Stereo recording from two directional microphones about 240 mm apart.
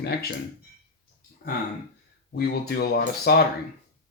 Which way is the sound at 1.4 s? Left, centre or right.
Left.